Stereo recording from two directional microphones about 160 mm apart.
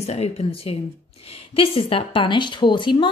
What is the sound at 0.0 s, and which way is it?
Speech, 40° left (ahead or behind).